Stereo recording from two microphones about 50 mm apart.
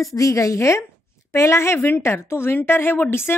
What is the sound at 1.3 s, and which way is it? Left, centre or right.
A woman's voice, left.